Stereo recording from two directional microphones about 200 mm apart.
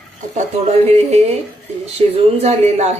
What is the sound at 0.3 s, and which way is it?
Speech, 30° right (ahead or behind).